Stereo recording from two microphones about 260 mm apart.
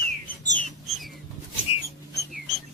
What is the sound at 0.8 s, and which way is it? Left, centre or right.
Bird flight, centre.